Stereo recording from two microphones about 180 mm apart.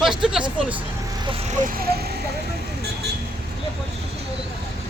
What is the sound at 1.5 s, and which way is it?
Speech, 50° right (ahead or behind).